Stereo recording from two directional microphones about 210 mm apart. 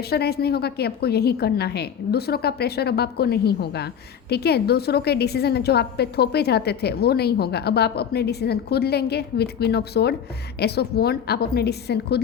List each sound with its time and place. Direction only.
0.0 s a woman's voice: 50° left (ahead or behind)